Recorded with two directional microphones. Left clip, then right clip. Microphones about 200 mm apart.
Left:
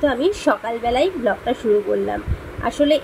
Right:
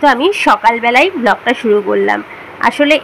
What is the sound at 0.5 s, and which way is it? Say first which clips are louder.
Speech: right 10 dB; 10° right (ahead or behind).